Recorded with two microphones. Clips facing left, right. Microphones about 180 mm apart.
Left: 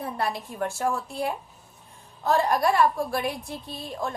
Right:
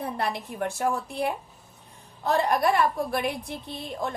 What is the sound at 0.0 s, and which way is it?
A woman's voice, 20° right (ahead or behind).